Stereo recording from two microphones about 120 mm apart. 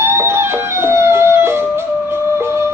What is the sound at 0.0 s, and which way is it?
Music, 20° right (ahead or behind).